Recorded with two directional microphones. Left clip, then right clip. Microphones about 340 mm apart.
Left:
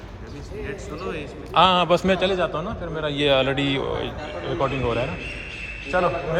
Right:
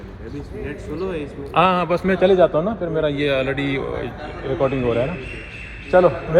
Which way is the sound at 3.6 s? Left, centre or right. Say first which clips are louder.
Even; left.